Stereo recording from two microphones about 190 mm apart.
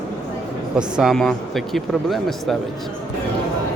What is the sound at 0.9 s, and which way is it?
A man's voice, centre (ahead or behind).